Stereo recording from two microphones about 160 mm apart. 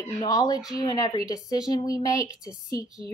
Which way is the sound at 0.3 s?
20° left (ahead or behind).